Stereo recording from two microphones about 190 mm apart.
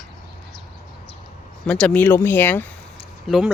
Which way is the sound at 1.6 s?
5° left (ahead or behind).